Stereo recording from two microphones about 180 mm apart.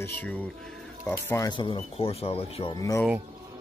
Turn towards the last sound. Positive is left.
turn(degrees=20)  # may be behind; listen again after turning